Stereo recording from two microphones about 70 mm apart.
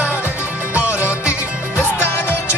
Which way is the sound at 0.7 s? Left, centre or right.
Right.